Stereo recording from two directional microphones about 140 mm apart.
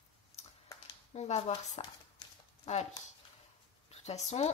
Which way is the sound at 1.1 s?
50° left (ahead or behind).